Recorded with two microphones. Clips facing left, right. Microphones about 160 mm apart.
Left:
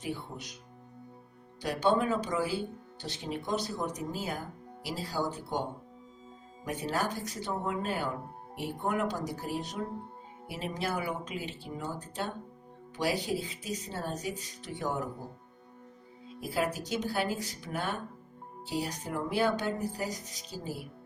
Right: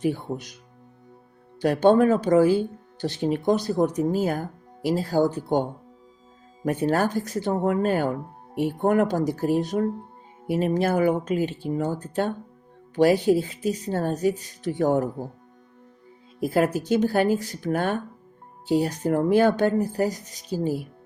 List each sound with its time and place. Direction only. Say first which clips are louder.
0.0 s speech: right 12 dB; 50° right (ahead or behind)
1.6 s speech: right 10 dB; 50° right (ahead or behind)
6.7 s speech: right 10 dB; 55° right (ahead or behind)
16.4 s speech: right 10 dB; 50° right (ahead or behind)